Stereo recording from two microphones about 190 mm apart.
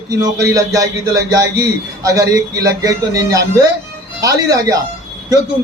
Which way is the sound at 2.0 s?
15° right (ahead or behind).